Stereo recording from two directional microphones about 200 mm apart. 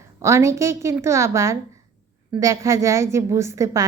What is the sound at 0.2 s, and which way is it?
A woman's voice, 15° right (ahead or behind).